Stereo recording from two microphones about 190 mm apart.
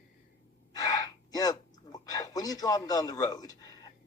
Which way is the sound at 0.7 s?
20° left (ahead or behind).